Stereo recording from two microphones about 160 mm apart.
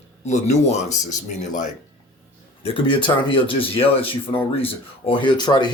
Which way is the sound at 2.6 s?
35° left (ahead or behind).